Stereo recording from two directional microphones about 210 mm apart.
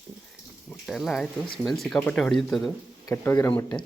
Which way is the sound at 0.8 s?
Centre (ahead or behind).